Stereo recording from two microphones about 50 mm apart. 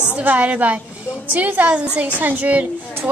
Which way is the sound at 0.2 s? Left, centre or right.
Right.